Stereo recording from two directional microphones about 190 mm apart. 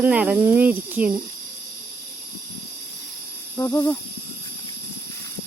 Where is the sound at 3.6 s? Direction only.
15° left (ahead or behind).